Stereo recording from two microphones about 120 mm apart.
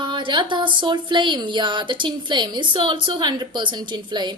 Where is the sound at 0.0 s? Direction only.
45° right (ahead or behind).